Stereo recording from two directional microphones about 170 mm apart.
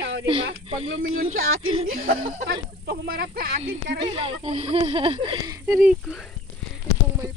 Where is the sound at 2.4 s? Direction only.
65° right (ahead or behind).